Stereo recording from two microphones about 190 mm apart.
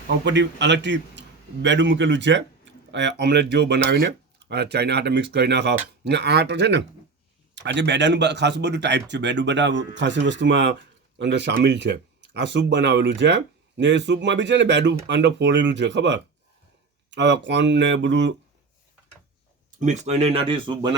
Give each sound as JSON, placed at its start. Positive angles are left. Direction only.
{"t": 0.3, "sound": "speech", "side_deg": -70}
{"t": 19.8, "sound": "speech", "side_deg": -40}